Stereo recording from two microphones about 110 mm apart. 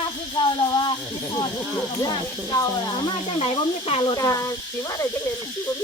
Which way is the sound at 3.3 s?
60° left (ahead or behind).